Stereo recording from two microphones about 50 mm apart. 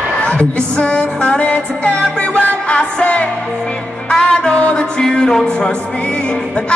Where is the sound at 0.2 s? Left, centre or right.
Left.